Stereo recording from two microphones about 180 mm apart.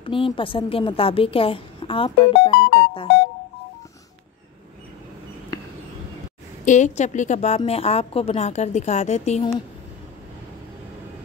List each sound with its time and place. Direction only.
0.0 s a woman's voice: 30° left (ahead or behind)
6.6 s a woman's voice: 40° left (ahead or behind)